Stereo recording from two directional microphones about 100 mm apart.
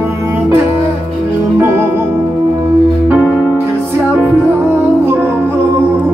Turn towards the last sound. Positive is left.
turn(degrees=-20)  # may be behind; listen again after turning